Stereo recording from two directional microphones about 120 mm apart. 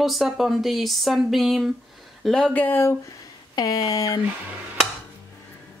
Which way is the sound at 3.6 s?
30° left (ahead or behind).